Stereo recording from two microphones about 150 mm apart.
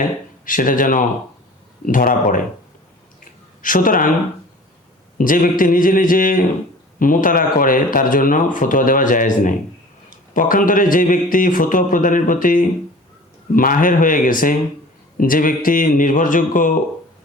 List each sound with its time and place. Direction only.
0.4 s speech: 65° left (ahead or behind)
3.6 s speech: 65° left (ahead or behind)
5.1 s a man's voice: 65° left (ahead or behind)